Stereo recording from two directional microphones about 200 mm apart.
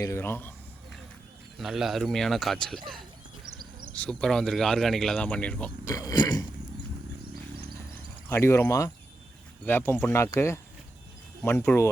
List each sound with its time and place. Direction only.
0.0 s speech: 15° left (ahead or behind)
1.5 s speech: centre (ahead or behind)
4.0 s speech: 5° left (ahead or behind)
5.8 s a sound: 20° left (ahead or behind)
8.3 s speech: 15° left (ahead or behind)